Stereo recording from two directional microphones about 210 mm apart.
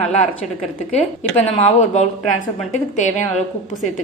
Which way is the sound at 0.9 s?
35° left (ahead or behind).